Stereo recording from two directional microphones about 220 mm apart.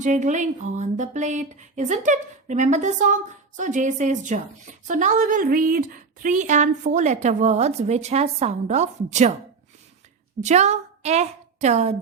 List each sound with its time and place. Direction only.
0.0 s speech: 35° right (ahead or behind)
10.4 s a woman's voice: 30° right (ahead or behind)